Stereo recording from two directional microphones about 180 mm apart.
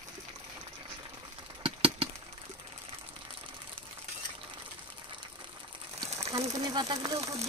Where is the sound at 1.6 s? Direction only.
30° right (ahead or behind).